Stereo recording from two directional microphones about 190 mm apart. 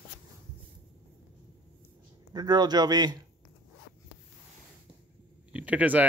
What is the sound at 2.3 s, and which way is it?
Speech, 20° right (ahead or behind).